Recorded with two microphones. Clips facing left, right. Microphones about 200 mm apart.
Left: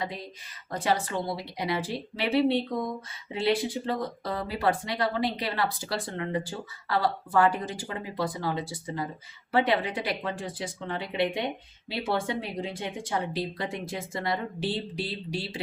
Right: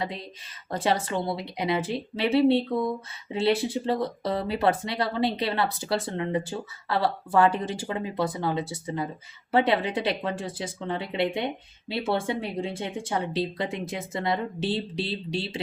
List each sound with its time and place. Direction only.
0.0 s speech: 25° right (ahead or behind)